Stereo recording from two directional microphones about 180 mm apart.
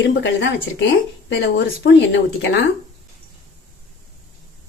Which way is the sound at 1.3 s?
70° left (ahead or behind).